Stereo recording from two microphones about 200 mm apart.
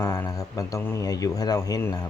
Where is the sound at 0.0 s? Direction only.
10° left (ahead or behind).